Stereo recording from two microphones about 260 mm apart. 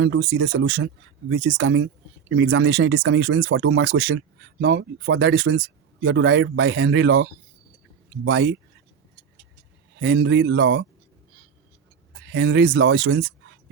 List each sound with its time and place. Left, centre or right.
0.0 s speech: right
10.0 s speech: right
12.3 s speech: right